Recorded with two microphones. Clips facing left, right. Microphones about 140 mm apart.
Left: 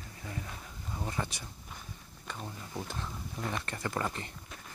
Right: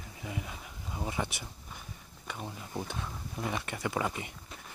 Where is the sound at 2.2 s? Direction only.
10° right (ahead or behind).